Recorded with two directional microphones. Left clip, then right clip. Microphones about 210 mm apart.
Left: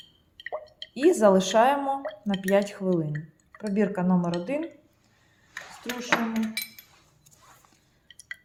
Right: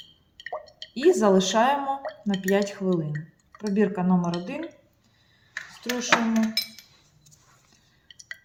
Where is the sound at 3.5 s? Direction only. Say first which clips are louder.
Right 2 dB; 20° left (ahead or behind).